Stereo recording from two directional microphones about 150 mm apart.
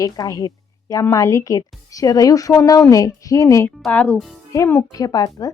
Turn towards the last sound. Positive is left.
turn(degrees=25)  # may be behind; listen again after turning